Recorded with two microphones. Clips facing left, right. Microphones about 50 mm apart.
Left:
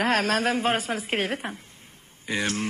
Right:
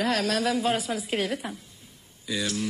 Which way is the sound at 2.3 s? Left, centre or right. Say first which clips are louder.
Left 2 dB; left.